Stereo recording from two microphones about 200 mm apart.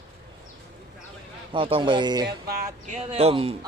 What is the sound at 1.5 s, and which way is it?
Speech, 25° right (ahead or behind).